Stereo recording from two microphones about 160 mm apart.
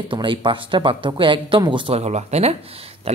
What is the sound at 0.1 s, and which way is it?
Speech, 30° right (ahead or behind).